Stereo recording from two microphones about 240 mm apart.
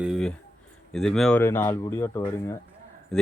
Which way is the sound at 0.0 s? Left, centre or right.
Centre.